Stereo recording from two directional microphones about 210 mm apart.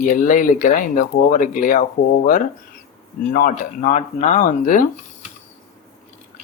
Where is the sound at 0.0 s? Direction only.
40° left (ahead or behind).